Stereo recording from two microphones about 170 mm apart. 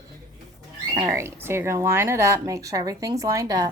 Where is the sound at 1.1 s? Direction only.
15° right (ahead or behind).